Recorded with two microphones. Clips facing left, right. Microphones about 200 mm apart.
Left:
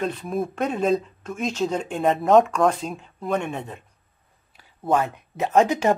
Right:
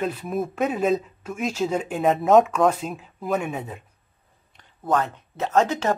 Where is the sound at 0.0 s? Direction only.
5° right (ahead or behind).